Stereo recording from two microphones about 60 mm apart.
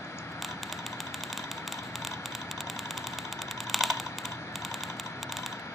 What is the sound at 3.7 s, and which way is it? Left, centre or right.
Typing, centre.